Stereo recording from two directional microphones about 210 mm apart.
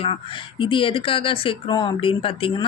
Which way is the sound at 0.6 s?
25° left (ahead or behind).